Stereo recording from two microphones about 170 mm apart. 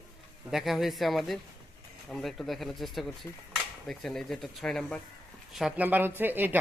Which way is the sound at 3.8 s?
5° left (ahead or behind).